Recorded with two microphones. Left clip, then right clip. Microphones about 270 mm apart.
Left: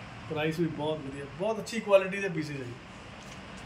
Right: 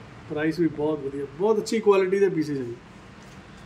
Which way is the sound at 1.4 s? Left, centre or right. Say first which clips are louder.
Right 11 dB; right.